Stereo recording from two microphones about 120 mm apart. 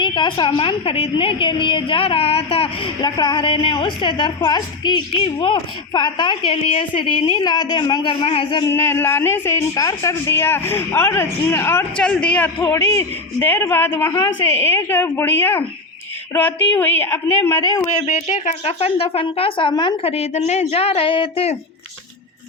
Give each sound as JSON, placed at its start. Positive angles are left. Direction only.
{"t": 0.0, "sound": "speech", "side_deg": 40}
{"t": 3.0, "sound": "a woman's voice", "side_deg": 40}
{"t": 5.1, "sound": "speech", "side_deg": 50}
{"t": 7.4, "sound": "a woman's voice", "side_deg": 35}
{"t": 8.2, "sound": "speech", "side_deg": 50}
{"t": 8.6, "sound": "a woman's voice", "side_deg": 20}
{"t": 11.9, "sound": "a woman's voice", "side_deg": 10}
{"t": 12.7, "sound": "a woman's voice", "side_deg": 25}
{"t": 14.1, "sound": "a woman's voice", "side_deg": 25}
{"t": 18.0, "sound": "speech", "side_deg": 50}